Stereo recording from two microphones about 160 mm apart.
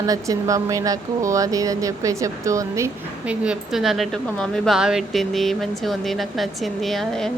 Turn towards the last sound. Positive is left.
turn(degrees=0)  # may be behind; listen again after turning